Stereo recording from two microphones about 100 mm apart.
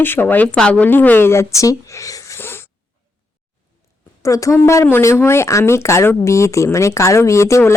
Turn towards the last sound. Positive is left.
turn(degrees=30)  # may be behind; listen again after turning